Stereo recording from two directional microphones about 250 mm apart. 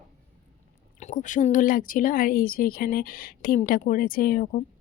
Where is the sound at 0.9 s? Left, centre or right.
Left.